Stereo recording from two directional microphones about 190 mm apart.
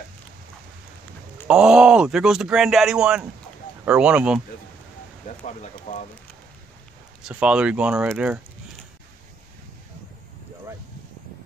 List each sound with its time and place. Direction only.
1.5 s speech: 5° right (ahead or behind)
5.4 s speech: 40° left (ahead or behind)
7.2 s speech: 5° right (ahead or behind)